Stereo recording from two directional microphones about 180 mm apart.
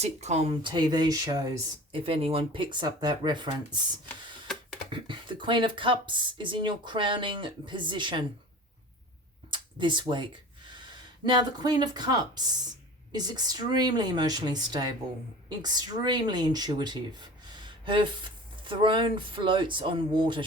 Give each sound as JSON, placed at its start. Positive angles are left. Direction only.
{"t": 0.0, "sound": "speech", "side_deg": -35}
{"t": 4.9, "sound": "speech", "side_deg": -25}
{"t": 9.5, "sound": "a sound", "side_deg": -25}
{"t": 11.3, "sound": "speech", "side_deg": -25}